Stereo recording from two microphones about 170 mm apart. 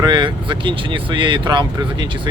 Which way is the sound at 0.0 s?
25° right (ahead or behind).